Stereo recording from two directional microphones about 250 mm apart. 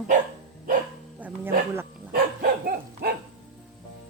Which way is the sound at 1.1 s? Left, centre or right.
Centre.